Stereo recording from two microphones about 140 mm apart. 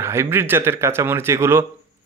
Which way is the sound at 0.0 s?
20° right (ahead or behind).